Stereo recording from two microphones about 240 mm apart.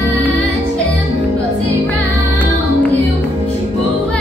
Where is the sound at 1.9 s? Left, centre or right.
Centre.